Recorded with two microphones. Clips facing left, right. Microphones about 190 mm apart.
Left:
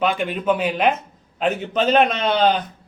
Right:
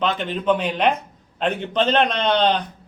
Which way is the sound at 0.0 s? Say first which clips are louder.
Left 1 dB; 10° left (ahead or behind).